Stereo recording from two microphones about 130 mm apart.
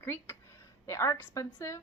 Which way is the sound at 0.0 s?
20° left (ahead or behind).